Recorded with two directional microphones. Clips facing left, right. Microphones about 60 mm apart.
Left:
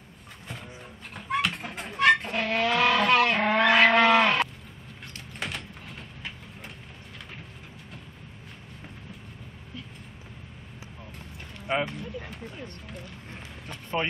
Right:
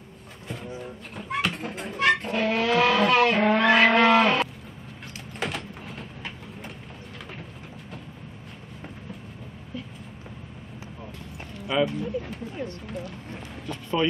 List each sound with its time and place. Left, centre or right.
1.1 s vehicle: centre
5.1 s sliding door: centre
11.6 s a sound: left
11.9 s a sound: centre
12.8 s speech: centre
13.7 s run: left